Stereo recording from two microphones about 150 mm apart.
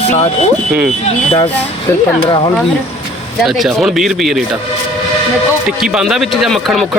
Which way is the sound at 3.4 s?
Centre (ahead or behind).